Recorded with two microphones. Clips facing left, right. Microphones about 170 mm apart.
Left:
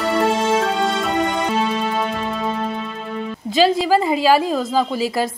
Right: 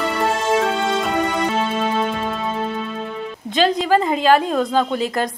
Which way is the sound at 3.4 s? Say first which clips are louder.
Left 2 dB; 5° left (ahead or behind).